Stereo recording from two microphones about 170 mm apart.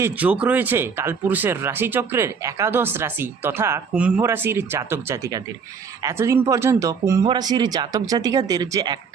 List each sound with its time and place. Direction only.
0.0 s speech: 10° right (ahead or behind)